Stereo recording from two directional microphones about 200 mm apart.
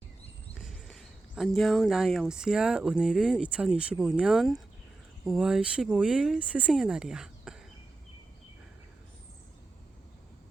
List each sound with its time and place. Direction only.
0.6 s speech: centre (ahead or behind)